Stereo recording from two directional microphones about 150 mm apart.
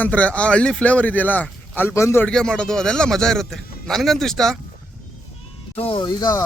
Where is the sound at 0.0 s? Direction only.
10° left (ahead or behind).